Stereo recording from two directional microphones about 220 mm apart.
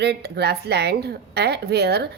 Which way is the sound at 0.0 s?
50° right (ahead or behind).